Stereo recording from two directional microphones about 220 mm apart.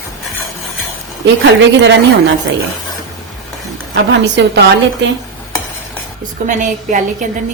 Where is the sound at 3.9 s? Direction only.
55° right (ahead or behind).